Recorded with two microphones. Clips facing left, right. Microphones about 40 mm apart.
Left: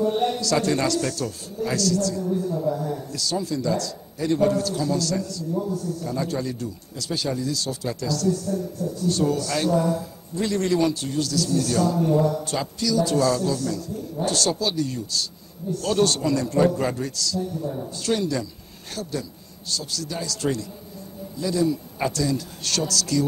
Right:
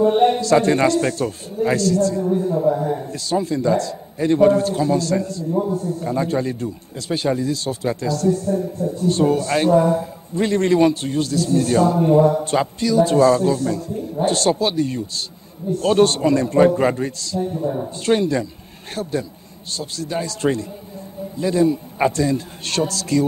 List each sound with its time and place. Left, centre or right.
0.0 s a man's voice: right